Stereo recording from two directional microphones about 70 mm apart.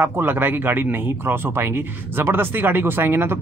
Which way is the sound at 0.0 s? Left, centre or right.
Right.